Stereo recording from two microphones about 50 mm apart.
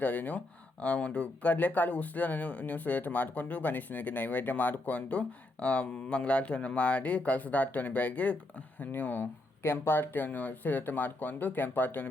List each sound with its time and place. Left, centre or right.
0.0 s speech: left